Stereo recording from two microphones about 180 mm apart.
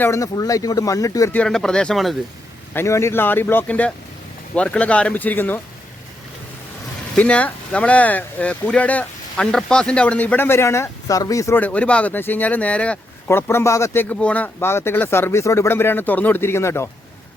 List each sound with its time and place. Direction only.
0.0 s speech: 15° left (ahead or behind)
1.4 s speech: 5° left (ahead or behind)
2.7 s speech: 15° left (ahead or behind)
7.2 s speech: 5° left (ahead or behind)